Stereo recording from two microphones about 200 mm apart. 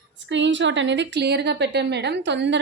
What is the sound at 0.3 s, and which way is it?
A woman's voice, 65° right (ahead or behind).